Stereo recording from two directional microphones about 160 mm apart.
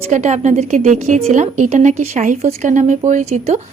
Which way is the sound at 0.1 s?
45° right (ahead or behind).